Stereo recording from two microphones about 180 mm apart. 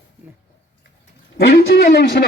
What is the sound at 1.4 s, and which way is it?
Speech, 65° left (ahead or behind).